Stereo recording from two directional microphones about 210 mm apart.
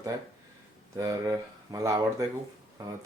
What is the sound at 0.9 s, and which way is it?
Speech, 15° right (ahead or behind).